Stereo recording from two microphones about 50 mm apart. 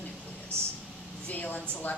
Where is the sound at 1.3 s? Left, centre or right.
Left.